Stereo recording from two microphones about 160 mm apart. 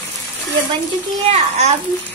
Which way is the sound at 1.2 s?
45° right (ahead or behind).